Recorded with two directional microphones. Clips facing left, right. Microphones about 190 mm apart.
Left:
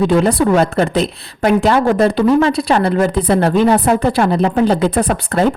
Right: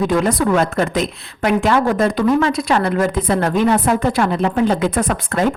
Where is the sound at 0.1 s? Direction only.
30° left (ahead or behind).